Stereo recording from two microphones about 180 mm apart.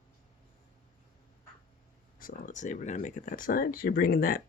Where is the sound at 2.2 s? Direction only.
45° left (ahead or behind).